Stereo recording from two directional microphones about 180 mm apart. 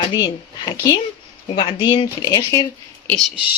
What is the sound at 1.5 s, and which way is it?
Speech, 25° left (ahead or behind).